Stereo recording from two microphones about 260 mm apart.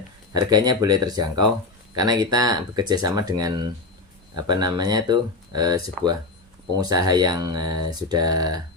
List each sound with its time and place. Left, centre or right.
0.3 s speech: centre
6.0 s speech: centre
6.7 s speech: centre